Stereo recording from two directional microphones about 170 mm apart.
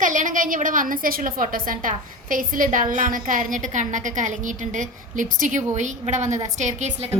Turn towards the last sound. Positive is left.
turn(degrees=-45)  # may be behind; listen again after turning